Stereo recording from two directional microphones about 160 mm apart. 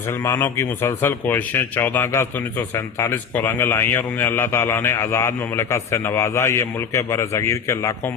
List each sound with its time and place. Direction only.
0.1 s speech: 15° left (ahead or behind)